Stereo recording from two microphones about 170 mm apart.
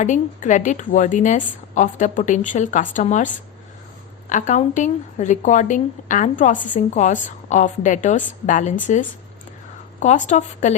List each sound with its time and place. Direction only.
0.0 s speech: 45° left (ahead or behind)